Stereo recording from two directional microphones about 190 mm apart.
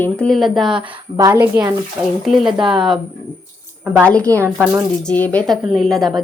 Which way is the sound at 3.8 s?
5° right (ahead or behind).